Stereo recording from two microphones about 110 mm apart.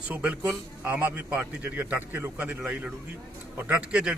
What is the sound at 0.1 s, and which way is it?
A man's voice, 15° right (ahead or behind).